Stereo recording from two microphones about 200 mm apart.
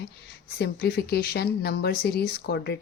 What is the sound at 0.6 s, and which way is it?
Speech, 50° left (ahead or behind).